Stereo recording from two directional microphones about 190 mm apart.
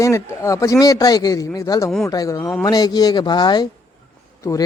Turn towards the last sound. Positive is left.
turn(degrees=15)  # may be behind; listen again after turning